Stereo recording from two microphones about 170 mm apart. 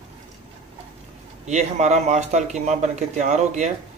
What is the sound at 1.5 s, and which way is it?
Speech, 40° right (ahead or behind).